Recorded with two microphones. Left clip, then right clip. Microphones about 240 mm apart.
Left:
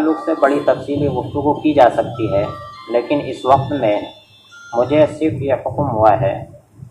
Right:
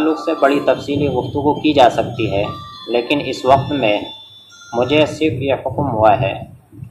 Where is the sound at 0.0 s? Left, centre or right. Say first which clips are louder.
Even; right.